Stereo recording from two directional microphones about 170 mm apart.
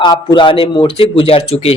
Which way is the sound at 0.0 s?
25° left (ahead or behind).